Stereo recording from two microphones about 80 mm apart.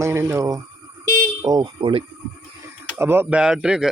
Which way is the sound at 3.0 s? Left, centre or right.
Right.